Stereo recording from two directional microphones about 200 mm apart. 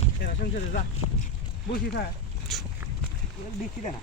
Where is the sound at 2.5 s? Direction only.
Centre (ahead or behind).